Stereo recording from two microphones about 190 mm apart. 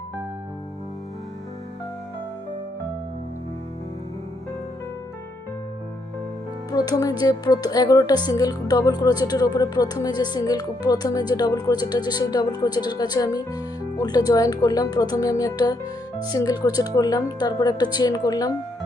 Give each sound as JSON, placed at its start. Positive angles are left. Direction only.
{"t": 6.7, "sound": "speech", "side_deg": 20}